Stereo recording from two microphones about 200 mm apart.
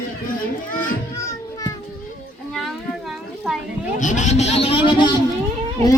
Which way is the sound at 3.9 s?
40° left (ahead or behind).